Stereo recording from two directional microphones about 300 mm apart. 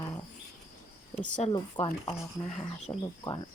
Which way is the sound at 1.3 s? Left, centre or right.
Centre.